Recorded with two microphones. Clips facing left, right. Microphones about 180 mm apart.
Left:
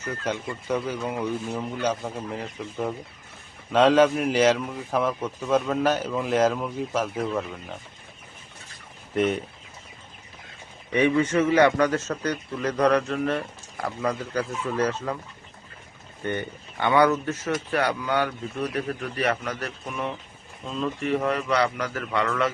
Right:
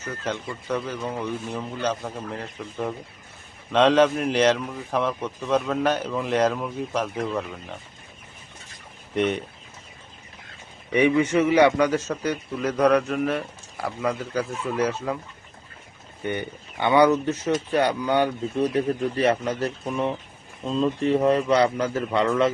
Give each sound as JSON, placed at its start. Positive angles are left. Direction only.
{"t": 0.3, "sound": "a man's voice", "side_deg": 10}
{"t": 9.1, "sound": "a man's voice", "side_deg": 0}
{"t": 10.9, "sound": "a man's voice", "side_deg": -10}
{"t": 16.2, "sound": "speech", "side_deg": -15}